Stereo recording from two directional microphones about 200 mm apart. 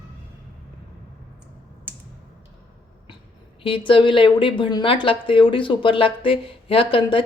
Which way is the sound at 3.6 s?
25° left (ahead or behind).